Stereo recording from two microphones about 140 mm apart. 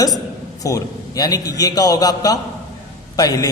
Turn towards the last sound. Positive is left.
turn(degrees=25)  # may be behind; listen again after turning